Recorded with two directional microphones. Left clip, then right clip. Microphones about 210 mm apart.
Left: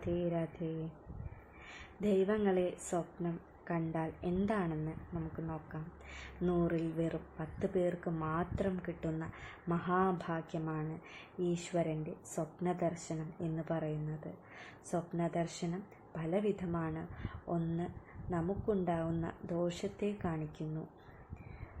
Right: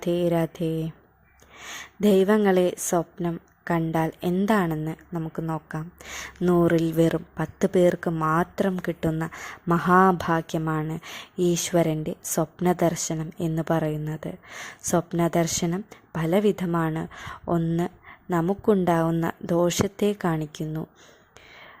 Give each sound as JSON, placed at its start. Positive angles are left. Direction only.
{"t": 0.0, "sound": "a woman's voice", "side_deg": -40}